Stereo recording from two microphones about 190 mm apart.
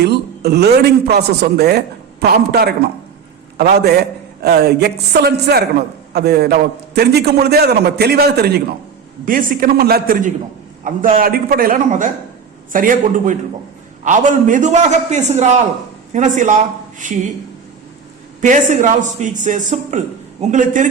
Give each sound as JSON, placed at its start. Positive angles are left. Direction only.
{"t": 0.0, "sound": "a man's voice", "side_deg": -60}
{"t": 9.2, "sound": "a man's voice", "side_deg": -45}
{"t": 18.4, "sound": "a man's voice", "side_deg": -40}